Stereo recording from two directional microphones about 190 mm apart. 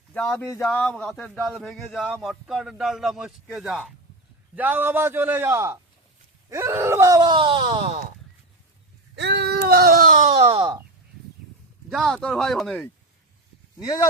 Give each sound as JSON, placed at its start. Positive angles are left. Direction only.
{"t": 0.1, "sound": "a man's voice", "side_deg": 5}
{"t": 9.1, "sound": "baby cry", "side_deg": -65}
{"t": 10.3, "sound": "wail", "side_deg": -25}
{"t": 11.9, "sound": "speech", "side_deg": 0}
{"t": 13.7, "sound": "speech", "side_deg": 20}